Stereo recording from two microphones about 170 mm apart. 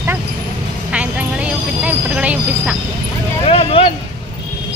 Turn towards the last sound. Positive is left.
turn(degrees=35)  # may be behind; listen again after turning